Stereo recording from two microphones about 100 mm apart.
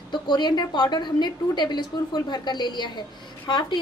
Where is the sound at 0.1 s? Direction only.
50° left (ahead or behind).